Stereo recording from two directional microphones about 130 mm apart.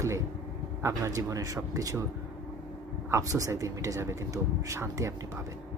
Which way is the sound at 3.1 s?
25° right (ahead or behind).